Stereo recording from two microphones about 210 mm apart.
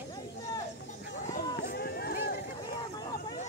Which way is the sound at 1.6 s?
45° left (ahead or behind).